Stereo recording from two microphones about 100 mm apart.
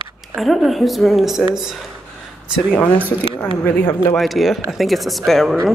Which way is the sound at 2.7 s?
10° left (ahead or behind).